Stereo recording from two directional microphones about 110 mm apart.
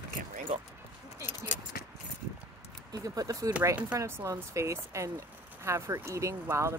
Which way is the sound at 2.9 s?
35° right (ahead or behind).